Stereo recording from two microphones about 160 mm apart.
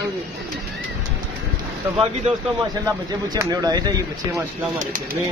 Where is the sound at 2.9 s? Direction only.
20° right (ahead or behind).